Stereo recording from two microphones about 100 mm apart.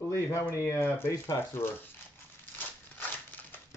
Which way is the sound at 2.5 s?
20° left (ahead or behind).